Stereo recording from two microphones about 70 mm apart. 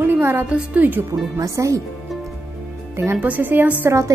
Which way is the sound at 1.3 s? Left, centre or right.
Right.